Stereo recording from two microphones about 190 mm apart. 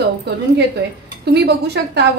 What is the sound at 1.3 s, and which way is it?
Speech, 60° right (ahead or behind).